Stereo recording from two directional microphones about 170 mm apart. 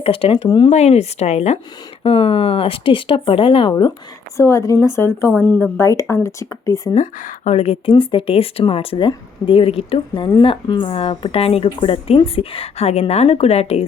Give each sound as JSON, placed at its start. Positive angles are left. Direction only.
{"t": 0.0, "sound": "speech", "side_deg": 35}
{"t": 0.7, "sound": "speech", "side_deg": 40}
{"t": 5.7, "sound": "speech", "side_deg": 15}
{"t": 6.9, "sound": "speech", "side_deg": 45}